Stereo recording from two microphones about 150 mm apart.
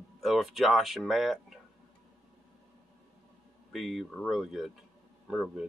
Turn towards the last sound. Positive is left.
turn(degrees=0)  # may be behind; listen again after turning